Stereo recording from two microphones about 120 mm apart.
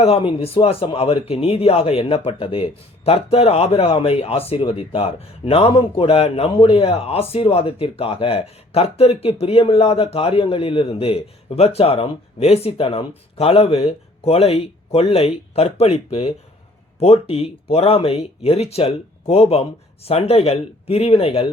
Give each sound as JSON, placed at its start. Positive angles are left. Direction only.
{"t": 0.0, "sound": "a man's voice", "side_deg": 55}